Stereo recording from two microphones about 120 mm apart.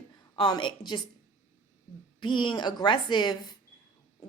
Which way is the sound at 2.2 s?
45° left (ahead or behind).